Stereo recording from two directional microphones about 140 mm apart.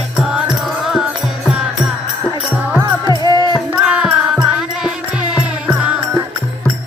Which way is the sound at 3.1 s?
30° right (ahead or behind).